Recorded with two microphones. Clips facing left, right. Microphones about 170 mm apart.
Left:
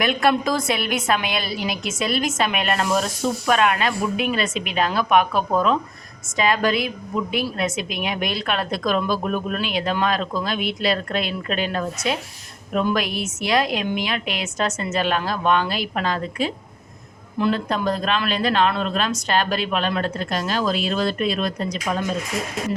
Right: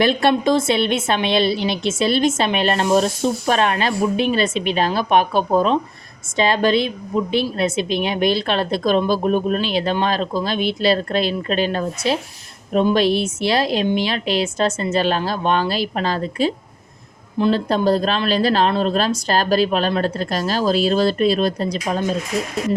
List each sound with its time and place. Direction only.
0.0 s a woman's voice: 30° right (ahead or behind)